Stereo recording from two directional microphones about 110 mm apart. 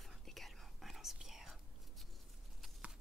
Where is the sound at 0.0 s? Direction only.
Centre (ahead or behind).